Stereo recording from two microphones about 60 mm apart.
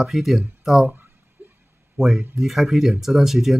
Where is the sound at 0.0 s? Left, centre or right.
Centre.